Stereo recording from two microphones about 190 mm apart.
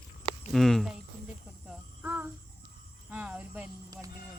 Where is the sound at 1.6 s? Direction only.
10° right (ahead or behind).